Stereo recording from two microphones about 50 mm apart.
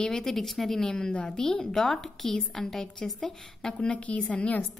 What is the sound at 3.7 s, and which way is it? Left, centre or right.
Speech, left.